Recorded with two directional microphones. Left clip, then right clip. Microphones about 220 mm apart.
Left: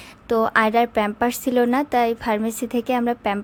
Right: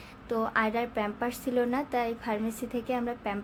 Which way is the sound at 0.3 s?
40° left (ahead or behind).